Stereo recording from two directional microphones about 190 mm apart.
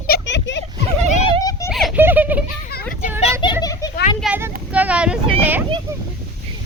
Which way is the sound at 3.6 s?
20° left (ahead or behind).